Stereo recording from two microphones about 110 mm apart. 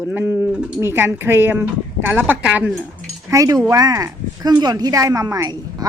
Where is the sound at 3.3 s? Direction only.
30° right (ahead or behind).